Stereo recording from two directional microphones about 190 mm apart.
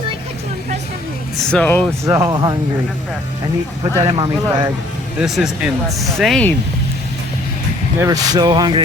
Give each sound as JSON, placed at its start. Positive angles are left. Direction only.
{"t": 1.4, "sound": "speech", "side_deg": 5}
{"t": 2.0, "sound": "speech", "side_deg": -15}
{"t": 4.0, "sound": "speech", "side_deg": -25}
{"t": 5.1, "sound": "speech", "side_deg": -5}
{"t": 7.9, "sound": "speech", "side_deg": -20}